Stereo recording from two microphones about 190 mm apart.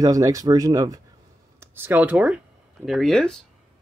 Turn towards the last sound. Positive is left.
turn(degrees=0)  # may be behind; listen again after turning